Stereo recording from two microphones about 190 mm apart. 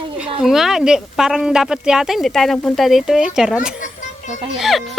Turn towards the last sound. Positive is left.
turn(degrees=0)  # may be behind; listen again after turning